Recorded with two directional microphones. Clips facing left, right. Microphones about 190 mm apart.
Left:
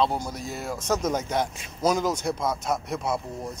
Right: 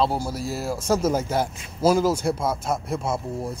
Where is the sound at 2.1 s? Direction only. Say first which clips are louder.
Right 3 dB; 30° right (ahead or behind).